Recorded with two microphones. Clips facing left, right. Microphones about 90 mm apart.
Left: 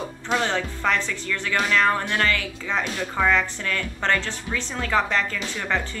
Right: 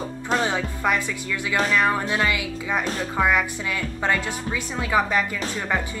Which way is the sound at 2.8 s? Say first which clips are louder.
Right 1 dB; 40° right (ahead or behind).